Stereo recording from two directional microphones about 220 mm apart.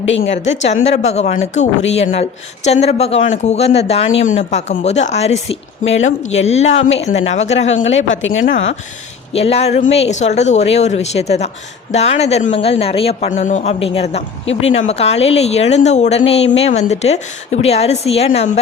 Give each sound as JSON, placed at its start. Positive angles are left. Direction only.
{"t": 0.2, "sound": "speech", "side_deg": 30}
{"t": 7.9, "sound": "speech", "side_deg": 60}
{"t": 8.4, "sound": "speech", "side_deg": 30}